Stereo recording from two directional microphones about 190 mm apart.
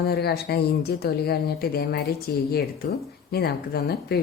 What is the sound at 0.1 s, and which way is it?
A woman's voice, 55° left (ahead or behind).